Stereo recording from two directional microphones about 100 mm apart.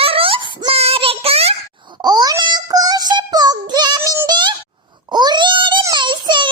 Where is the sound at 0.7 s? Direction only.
80° right.